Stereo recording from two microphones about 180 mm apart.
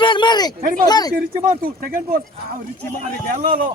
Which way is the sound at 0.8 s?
20° left (ahead or behind).